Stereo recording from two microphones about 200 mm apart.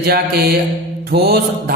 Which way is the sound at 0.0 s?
50° right (ahead or behind).